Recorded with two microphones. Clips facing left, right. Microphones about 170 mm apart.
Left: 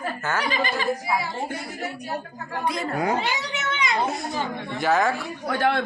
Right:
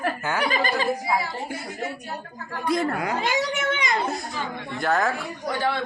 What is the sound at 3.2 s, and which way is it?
Cat, 45° right (ahead or behind).